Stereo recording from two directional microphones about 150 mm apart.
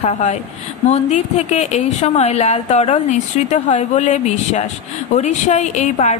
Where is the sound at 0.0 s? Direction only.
45° left (ahead or behind).